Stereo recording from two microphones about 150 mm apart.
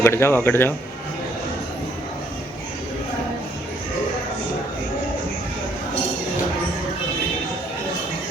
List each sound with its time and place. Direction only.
0.0 s speech: 15° left (ahead or behind)